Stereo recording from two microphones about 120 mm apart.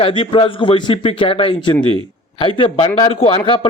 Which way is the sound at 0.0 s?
45° left (ahead or behind).